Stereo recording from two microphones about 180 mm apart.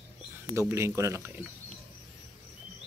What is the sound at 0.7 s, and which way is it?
Speech, 15° right (ahead or behind).